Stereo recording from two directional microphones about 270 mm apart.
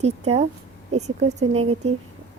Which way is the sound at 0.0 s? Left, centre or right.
Right.